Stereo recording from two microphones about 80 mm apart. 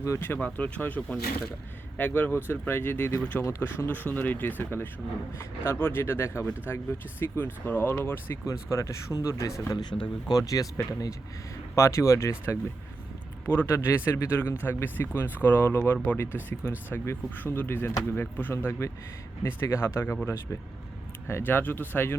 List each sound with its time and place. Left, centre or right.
0.3 s speech: centre
8.4 s speech: left
9.7 s speech: left
10.4 s speech: left
11.7 s speech: left